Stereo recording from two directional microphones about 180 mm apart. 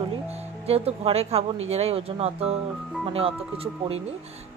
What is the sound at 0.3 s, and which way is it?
Speech, 35° right (ahead or behind).